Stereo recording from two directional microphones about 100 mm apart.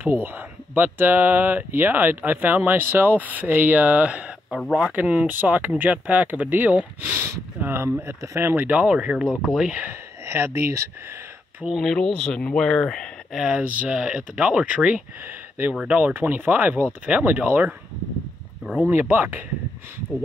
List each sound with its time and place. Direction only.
0.0 s speech: 20° right (ahead or behind)
4.6 s speech: centre (ahead or behind)
4.9 s speech: 15° right (ahead or behind)
9.8 s speech: 25° right (ahead or behind)
11.8 s speech: 5° left (ahead or behind)
13.4 s speech: 10° right (ahead or behind)
18.9 s speech: 20° right (ahead or behind)